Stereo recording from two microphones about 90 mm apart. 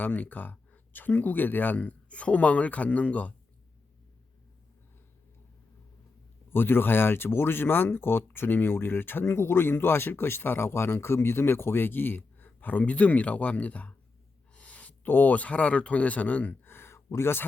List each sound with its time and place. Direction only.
0.0 s speech: 20° left (ahead or behind)
6.5 s speech: 25° left (ahead or behind)